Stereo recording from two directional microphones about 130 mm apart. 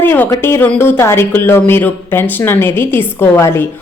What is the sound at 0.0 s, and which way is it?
A woman's voice, 15° left (ahead or behind).